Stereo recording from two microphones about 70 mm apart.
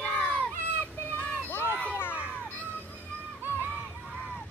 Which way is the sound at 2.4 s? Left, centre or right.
Left.